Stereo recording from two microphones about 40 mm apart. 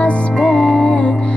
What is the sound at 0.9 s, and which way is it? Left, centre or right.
Music, left.